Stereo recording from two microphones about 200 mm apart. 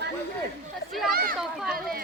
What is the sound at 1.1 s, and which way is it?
Children playing, 45° right (ahead or behind).